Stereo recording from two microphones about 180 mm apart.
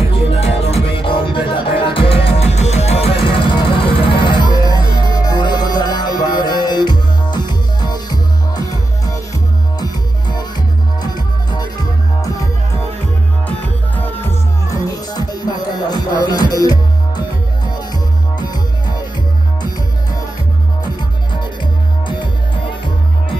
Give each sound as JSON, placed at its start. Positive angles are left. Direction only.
{"t": 0.3, "sound": "music", "side_deg": 35}
{"t": 11.5, "sound": "music", "side_deg": 20}
{"t": 13.9, "sound": "music", "side_deg": 10}
{"t": 15.1, "sound": "music", "side_deg": 20}